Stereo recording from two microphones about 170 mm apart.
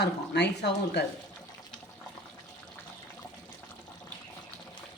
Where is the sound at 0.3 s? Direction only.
85° left.